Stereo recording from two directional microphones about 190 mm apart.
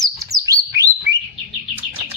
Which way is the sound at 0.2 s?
15° right (ahead or behind).